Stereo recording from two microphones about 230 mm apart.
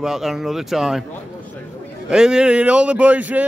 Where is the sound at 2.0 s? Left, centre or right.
Centre.